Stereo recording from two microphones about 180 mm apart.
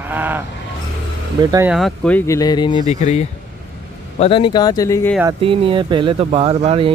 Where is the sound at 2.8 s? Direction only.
40° left (ahead or behind); by 5.1 s 20° left (ahead or behind).